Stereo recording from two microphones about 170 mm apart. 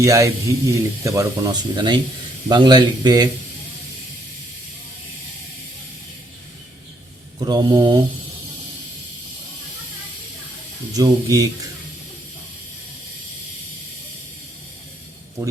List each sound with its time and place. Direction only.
0.0 s speech: 20° right (ahead or behind)
7.3 s speech: 25° right (ahead or behind)
10.9 s speech: 20° right (ahead or behind)